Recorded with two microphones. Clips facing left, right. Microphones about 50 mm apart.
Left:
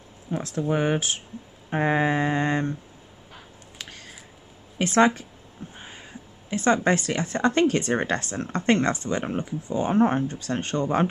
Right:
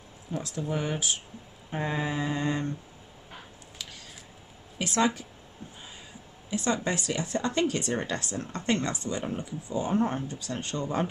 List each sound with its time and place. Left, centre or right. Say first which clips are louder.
0.3 s speech: left 6 dB; left
1.7 s mantra: left 8 dB; left
4.7 s speech: left 7 dB; left
5.8 s a sound: left 4 dB; left
6.5 s speech: left 7 dB; left